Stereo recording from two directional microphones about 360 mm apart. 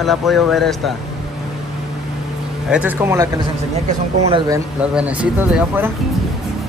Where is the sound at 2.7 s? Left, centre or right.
Centre.